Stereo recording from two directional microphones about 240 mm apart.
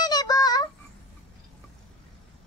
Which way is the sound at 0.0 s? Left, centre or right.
Centre.